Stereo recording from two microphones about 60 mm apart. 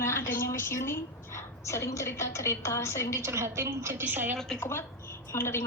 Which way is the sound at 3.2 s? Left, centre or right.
Right.